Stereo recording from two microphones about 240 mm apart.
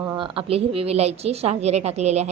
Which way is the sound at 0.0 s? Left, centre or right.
Centre.